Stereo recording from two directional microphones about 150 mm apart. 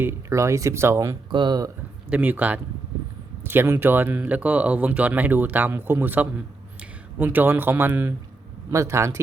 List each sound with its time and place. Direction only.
0.0 s speech: 15° right (ahead or behind)
1.3 s speech: 30° right (ahead or behind)
2.0 s speech: 10° right (ahead or behind)